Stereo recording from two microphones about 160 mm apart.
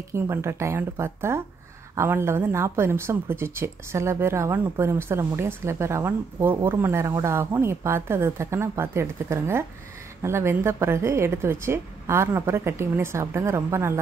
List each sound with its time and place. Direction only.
0.1 s a woman's voice: 15° right (ahead or behind)